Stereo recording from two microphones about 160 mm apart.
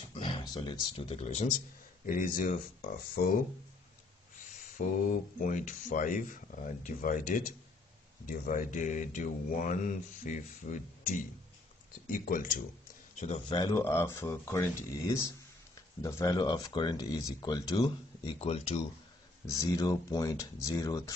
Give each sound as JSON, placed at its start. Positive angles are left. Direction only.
{"t": 0.1, "sound": "speech", "side_deg": 30}
{"t": 2.0, "sound": "speech", "side_deg": 60}
{"t": 4.8, "sound": "speech", "side_deg": 55}
{"t": 13.5, "sound": "speech", "side_deg": 25}
{"t": 13.7, "sound": "speech", "side_deg": 15}
{"t": 19.4, "sound": "speech", "side_deg": 20}